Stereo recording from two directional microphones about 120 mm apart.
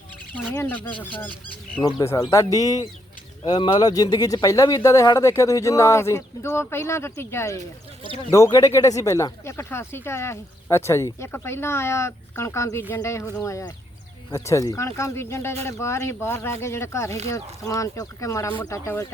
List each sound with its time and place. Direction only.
0.3 s speech: 20° left (ahead or behind)
1.8 s speech: 30° left (ahead or behind)